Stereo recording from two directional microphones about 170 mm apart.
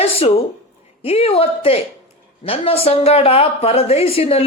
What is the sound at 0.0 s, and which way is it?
Speech, 35° left (ahead or behind).